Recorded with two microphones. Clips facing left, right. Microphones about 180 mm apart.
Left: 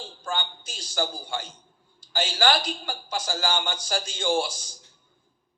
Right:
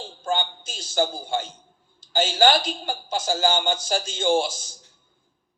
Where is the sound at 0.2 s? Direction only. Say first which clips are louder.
Right 6 dB; 25° right (ahead or behind).